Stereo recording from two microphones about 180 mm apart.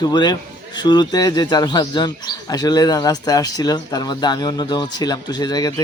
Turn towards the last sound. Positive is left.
turn(degrees=20)  # may be behind; listen again after turning